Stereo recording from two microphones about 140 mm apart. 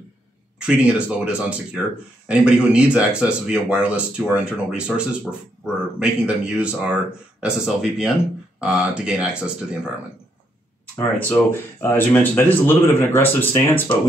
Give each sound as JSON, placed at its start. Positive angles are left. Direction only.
{"t": 0.6, "sound": "speech", "side_deg": -5}
{"t": 11.1, "sound": "speech", "side_deg": 10}